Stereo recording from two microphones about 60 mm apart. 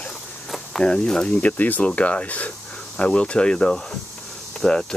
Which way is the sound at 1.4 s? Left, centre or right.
Left.